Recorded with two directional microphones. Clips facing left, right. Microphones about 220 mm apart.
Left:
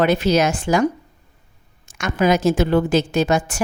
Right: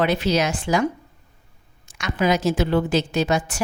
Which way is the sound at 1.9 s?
45° left (ahead or behind).